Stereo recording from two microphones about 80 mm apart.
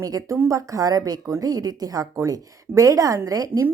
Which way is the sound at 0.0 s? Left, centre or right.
Right.